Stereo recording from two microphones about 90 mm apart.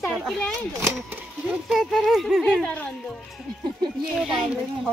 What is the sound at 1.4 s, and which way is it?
Speech, 5° right (ahead or behind).